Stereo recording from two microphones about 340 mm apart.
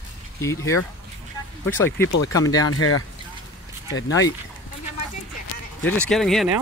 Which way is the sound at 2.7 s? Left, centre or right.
Left.